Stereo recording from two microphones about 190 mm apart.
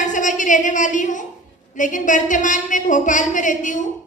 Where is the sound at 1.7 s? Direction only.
40° left (ahead or behind).